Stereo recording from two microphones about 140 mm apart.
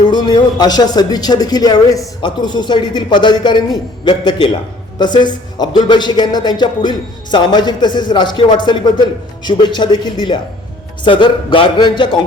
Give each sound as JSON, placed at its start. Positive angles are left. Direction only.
{"t": 0.1, "sound": "speech", "side_deg": 30}